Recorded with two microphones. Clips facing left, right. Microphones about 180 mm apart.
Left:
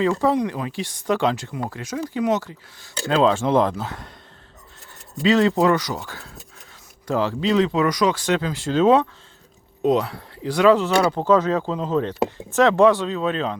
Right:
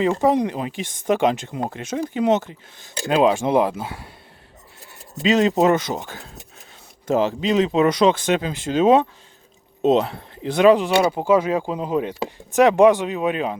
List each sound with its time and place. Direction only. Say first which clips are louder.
0.0 s speech: right 1 dB; 20° right (ahead or behind)
5.1 s speech: even; 20° right (ahead or behind)